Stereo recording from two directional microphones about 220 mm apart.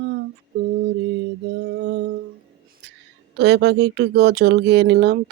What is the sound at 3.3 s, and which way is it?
Speech, 50° right (ahead or behind).